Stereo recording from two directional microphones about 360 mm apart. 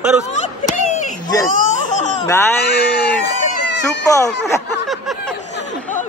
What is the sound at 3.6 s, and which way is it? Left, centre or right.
Chicken, left.